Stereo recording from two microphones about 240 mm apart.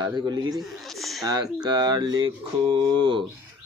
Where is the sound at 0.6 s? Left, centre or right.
Centre.